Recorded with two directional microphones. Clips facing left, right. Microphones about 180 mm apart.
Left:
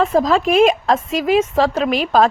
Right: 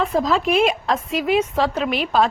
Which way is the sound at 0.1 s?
45° left (ahead or behind).